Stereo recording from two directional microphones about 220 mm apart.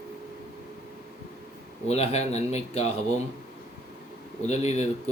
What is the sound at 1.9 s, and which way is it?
Speech, 30° left (ahead or behind).